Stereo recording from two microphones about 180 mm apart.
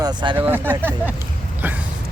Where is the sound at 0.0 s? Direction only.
25° right (ahead or behind).